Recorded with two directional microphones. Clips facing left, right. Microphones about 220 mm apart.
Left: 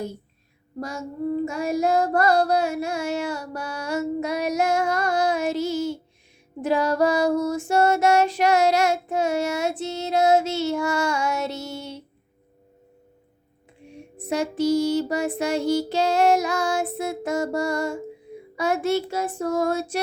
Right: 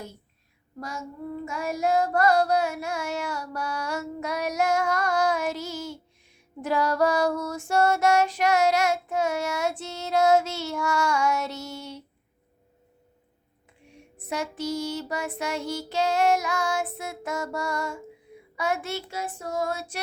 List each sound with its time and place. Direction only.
0.8 s child singing: 30° left (ahead or behind)
6.6 s female singing: 25° left (ahead or behind)
13.8 s a sound: 30° left (ahead or behind)
14.3 s child singing: 30° left (ahead or behind)